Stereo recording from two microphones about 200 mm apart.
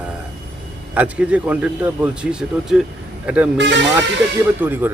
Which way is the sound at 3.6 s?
65° right (ahead or behind).